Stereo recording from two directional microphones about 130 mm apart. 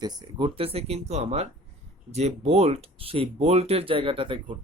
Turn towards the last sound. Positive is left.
turn(degrees=-40)  # may be behind; listen again after turning